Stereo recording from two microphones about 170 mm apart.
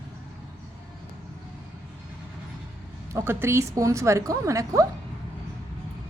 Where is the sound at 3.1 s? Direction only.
15° right (ahead or behind).